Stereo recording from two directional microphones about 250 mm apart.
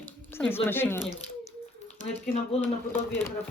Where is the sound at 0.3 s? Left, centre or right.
Centre.